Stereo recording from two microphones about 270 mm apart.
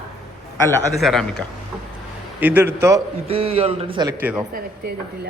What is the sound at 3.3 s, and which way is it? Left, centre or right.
Speech, right.